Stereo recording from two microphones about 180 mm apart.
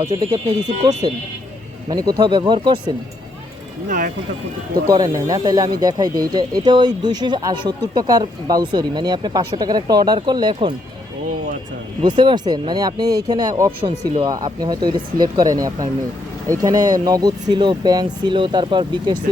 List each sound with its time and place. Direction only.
0.0 s speech: 30° right (ahead or behind)
1.9 s speech: 20° right (ahead or behind)
3.8 s speech: 45° right (ahead or behind)
4.9 s speech: 20° right (ahead or behind)
12.0 s speech: 25° right (ahead or behind)